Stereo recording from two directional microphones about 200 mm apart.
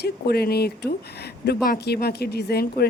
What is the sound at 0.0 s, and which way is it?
A woman's voice, 50° left (ahead or behind).